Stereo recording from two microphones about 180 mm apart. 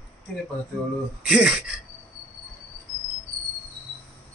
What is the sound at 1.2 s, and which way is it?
Speech, 5° right (ahead or behind).